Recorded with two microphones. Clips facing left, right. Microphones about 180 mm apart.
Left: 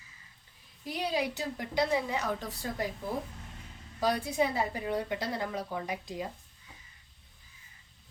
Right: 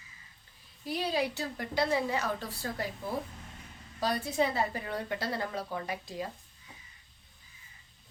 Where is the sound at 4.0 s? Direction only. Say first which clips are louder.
Left 1 dB; 15° left (ahead or behind).